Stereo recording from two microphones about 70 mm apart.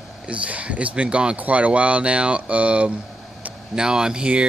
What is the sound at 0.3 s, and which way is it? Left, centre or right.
Speech, centre.